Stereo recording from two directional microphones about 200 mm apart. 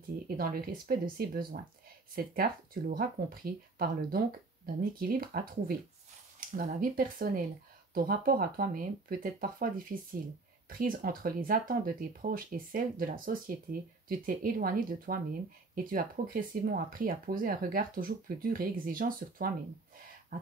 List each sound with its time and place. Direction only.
0.4 s speech: 50° right (ahead or behind)